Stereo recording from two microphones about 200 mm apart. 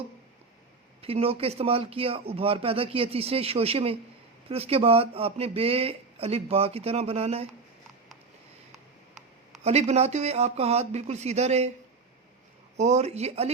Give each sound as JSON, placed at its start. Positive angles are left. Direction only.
{"t": 1.0, "sound": "speech", "side_deg": -30}
{"t": 9.6, "sound": "speech", "side_deg": -30}
{"t": 12.7, "sound": "speech", "side_deg": -35}